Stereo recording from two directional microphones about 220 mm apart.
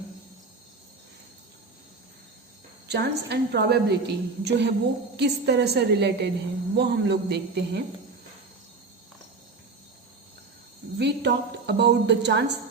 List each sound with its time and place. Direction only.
2.8 s a woman's voice: 50° right (ahead or behind)
10.9 s a woman's voice: 50° right (ahead or behind)